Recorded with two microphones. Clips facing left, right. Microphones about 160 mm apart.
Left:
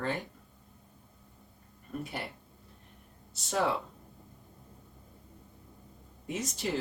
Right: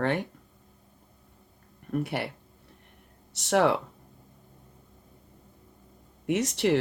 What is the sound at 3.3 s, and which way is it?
Speech, 75° right (ahead or behind).